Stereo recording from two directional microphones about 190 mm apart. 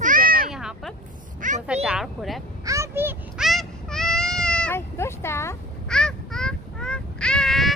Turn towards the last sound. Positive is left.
turn(degrees=0)  # may be behind; listen again after turning